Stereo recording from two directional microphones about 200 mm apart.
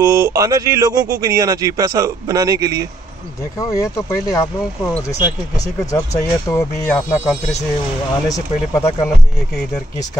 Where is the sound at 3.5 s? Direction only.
15° left (ahead or behind).